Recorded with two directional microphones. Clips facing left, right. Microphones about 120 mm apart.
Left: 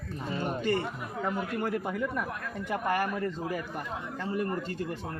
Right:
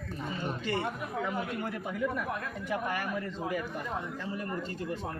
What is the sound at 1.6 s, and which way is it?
Speech, 45° left (ahead or behind).